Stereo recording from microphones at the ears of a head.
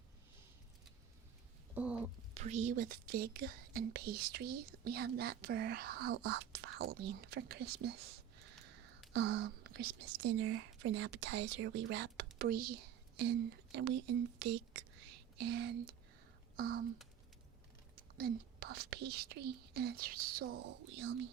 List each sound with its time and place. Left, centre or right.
2.3 s speech: right